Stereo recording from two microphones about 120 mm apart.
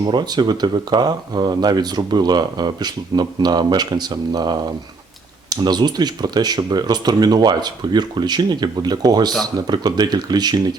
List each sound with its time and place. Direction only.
0.0 s speech: 35° right (ahead or behind)